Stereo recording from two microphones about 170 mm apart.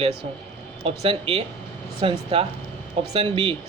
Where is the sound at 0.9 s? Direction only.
35° right (ahead or behind).